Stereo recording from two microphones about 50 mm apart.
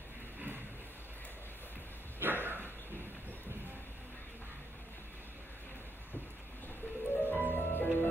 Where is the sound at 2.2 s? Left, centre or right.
Right.